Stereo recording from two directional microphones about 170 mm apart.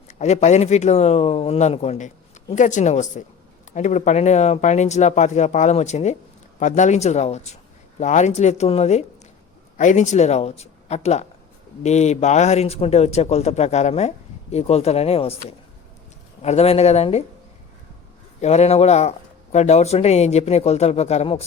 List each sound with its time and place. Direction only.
0.1 s speech: 40° left (ahead or behind)
18.3 s speech: 40° left (ahead or behind)